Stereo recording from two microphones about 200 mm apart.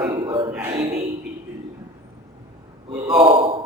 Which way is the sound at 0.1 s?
25° right (ahead or behind).